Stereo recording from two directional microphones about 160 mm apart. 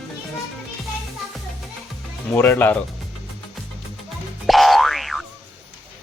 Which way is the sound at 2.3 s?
10° left (ahead or behind).